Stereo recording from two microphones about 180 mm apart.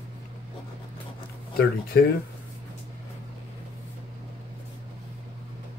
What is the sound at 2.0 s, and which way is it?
Speech, 70° left (ahead or behind).